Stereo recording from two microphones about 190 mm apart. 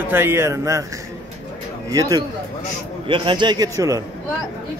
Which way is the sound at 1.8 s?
20° right (ahead or behind).